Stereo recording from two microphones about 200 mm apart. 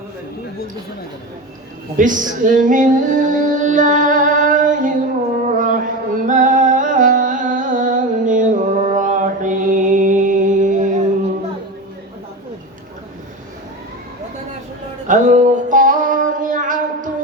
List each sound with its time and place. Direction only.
2.0 s music: 40° right (ahead or behind)
15.0 s music: 40° right (ahead or behind)